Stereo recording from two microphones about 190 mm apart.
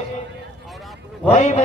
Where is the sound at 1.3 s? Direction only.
35° left (ahead or behind).